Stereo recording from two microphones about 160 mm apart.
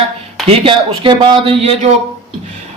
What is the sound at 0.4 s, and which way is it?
A man's voice, 35° right (ahead or behind).